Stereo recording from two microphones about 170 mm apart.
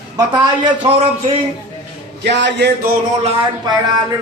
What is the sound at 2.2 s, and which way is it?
Speech, 85° right.